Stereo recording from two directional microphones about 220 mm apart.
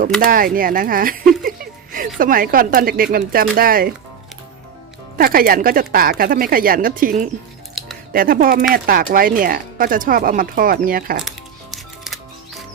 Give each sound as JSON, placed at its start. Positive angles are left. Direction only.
{"t": 0.3, "sound": "speech", "side_deg": -40}
{"t": 5.1, "sound": "speech", "side_deg": -40}
{"t": 7.8, "sound": "music", "side_deg": 0}
{"t": 8.1, "sound": "speech", "side_deg": -40}
{"t": 11.3, "sound": "music", "side_deg": 0}